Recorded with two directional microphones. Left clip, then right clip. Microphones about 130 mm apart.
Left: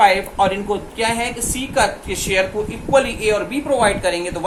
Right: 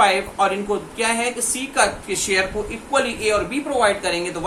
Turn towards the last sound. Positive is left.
turn(degrees=25)  # may be behind; listen again after turning